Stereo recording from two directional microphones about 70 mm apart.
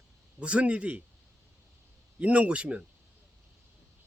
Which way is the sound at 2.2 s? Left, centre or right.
Centre.